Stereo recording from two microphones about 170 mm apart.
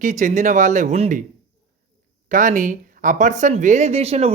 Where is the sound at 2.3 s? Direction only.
50° right (ahead or behind).